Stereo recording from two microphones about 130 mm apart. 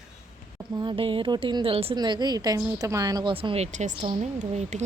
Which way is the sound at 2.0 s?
35° right (ahead or behind).